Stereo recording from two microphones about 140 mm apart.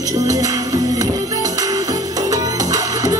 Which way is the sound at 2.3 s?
25° right (ahead or behind).